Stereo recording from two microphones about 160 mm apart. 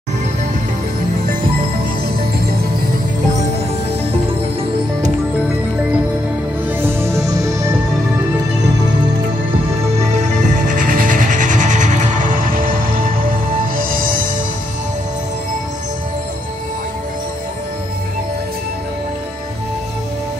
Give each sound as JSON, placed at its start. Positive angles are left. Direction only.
{"t": 7.0, "sound": "music", "side_deg": -20}
{"t": 9.9, "sound": "music", "side_deg": -50}